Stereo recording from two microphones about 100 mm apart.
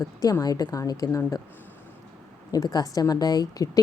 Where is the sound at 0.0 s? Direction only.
35° left (ahead or behind).